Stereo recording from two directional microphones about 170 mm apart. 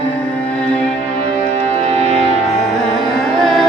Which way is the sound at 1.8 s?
40° right (ahead or behind).